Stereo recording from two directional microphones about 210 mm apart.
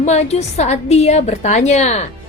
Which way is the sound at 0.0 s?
30° left (ahead or behind).